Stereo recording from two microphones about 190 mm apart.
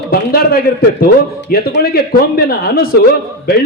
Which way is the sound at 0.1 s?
50° left (ahead or behind).